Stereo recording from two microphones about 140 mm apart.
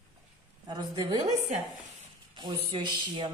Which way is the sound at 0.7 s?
30° right (ahead or behind).